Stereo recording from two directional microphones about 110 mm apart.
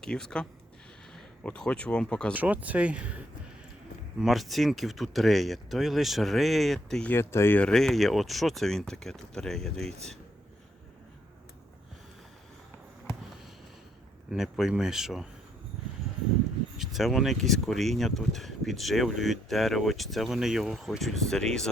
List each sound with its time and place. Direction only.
0.0 s speech: 5° left (ahead or behind)
1.5 s speech: 10° left (ahead or behind)
2.3 s speech: 15° right (ahead or behind)
4.2 s speech: centre (ahead or behind)
7.0 s speech: 20° left (ahead or behind)
7.6 s speech: 5° left (ahead or behind)
14.3 s speech: 5° right (ahead or behind)
16.7 s speech: centre (ahead or behind)